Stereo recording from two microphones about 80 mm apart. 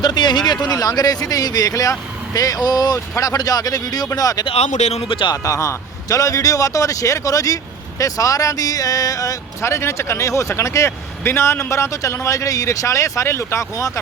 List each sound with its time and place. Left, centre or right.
0.0 s a man's voice: left
5.0 s speech: left
5.3 s a man's voice: left